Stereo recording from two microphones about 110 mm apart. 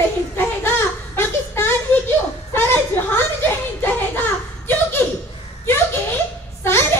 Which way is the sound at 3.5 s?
20° left (ahead or behind).